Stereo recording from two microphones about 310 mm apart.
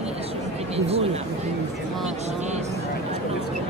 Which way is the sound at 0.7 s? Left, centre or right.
Centre.